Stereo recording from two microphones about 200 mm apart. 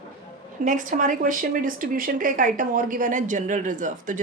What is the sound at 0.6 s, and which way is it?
Speech, 40° right (ahead or behind).